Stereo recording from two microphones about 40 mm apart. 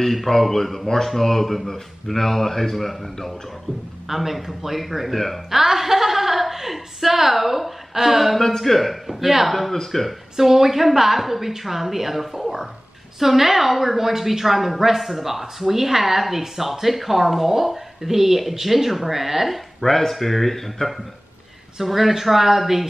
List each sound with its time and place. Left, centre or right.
0.0 s a woman's voice: centre
5.6 s a woman's voice: centre
8.4 s a woman's voice: centre
9.7 s a woman's voice: centre
10.3 s a woman's voice: centre
19.9 s a woman's voice: centre
21.7 s a woman's voice: centre